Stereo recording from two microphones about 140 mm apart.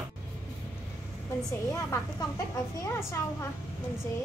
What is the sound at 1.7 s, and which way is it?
Speech, 25° left (ahead or behind).